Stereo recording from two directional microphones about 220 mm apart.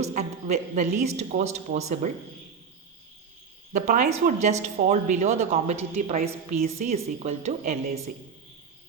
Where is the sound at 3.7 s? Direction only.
35° right (ahead or behind).